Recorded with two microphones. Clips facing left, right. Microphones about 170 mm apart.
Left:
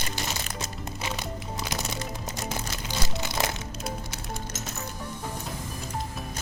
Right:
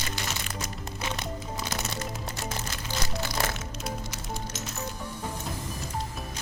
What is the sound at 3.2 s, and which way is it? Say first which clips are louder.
Music: left 1 dB; 20° left (ahead or behind).